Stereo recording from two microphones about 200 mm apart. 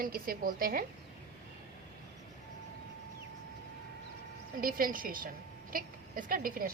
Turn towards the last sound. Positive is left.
turn(degrees=-45)  # may be behind; listen again after turning